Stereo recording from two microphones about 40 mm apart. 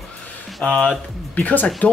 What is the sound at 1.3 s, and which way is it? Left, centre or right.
Speech, left.